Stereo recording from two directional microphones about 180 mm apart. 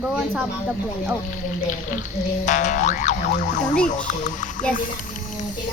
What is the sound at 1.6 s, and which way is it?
Speech, 45° left (ahead or behind).